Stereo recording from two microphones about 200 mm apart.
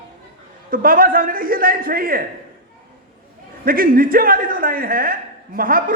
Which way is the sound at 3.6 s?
45° right (ahead or behind).